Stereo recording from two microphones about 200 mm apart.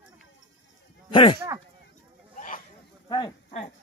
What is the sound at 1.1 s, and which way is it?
Speech, 25° left (ahead or behind).